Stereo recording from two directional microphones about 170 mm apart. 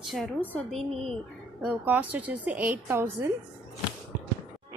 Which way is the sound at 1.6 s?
10° right (ahead or behind).